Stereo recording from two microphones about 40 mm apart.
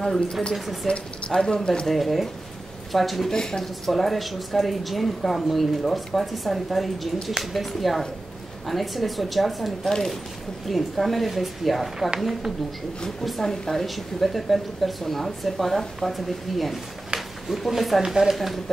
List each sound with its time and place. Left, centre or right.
0.0 s speech: centre
0.8 s speech: left
1.9 s speech: centre
9.8 s speech: centre
10.7 s speech: centre
13.4 s speech: centre
17.1 s a sound: centre
17.5 s speech: centre